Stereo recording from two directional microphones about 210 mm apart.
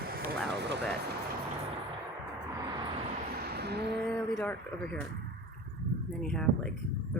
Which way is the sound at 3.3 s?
50° right (ahead or behind).